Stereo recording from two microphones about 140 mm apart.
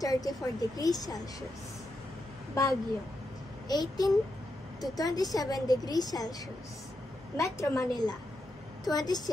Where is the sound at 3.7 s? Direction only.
30° left (ahead or behind).